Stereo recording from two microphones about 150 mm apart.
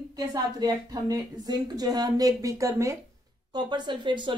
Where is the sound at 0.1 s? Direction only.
25° right (ahead or behind).